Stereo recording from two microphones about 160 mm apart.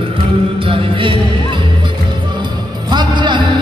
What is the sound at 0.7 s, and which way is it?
Music, 35° right (ahead or behind).